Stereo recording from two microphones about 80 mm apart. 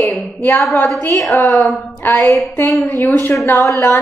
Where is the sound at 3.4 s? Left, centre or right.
Left.